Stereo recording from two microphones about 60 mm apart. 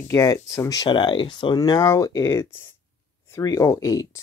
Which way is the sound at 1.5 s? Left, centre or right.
Left.